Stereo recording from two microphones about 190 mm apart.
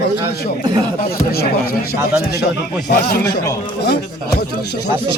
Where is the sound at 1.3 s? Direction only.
55° left (ahead or behind).